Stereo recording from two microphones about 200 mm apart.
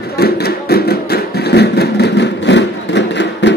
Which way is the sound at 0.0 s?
50° left (ahead or behind).